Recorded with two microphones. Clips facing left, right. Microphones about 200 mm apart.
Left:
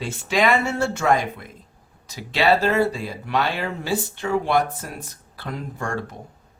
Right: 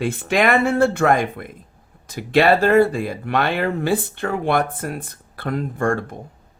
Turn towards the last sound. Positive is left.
turn(degrees=-55)  # may be behind; listen again after turning